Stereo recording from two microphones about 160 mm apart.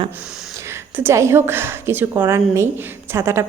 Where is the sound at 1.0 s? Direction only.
15° right (ahead or behind).